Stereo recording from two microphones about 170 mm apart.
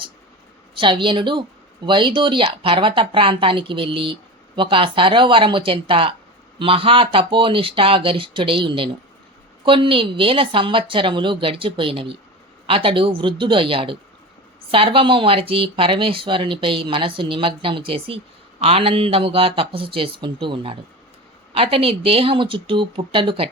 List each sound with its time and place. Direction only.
0.7 s speech: 30° right (ahead or behind)